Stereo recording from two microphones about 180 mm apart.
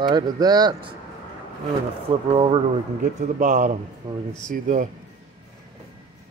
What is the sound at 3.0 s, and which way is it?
Speech, 45° right (ahead or behind).